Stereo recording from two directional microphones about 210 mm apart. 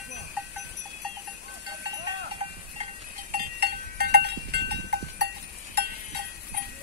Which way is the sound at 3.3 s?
45° right (ahead or behind).